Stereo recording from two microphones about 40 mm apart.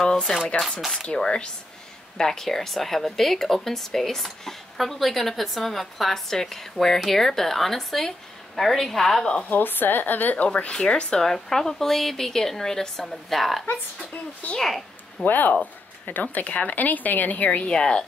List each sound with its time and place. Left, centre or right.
0.3 s a woman's voice: centre
0.7 s a woman's voice: centre
1.0 s a woman's voice: left
9.5 s a woman's voice: left
10.4 s speech: left
10.7 s a woman's voice: left; by 13.7 s centre
14.6 s a sound: centre
15.2 s a woman's voice: left
17.5 s a woman's voice: left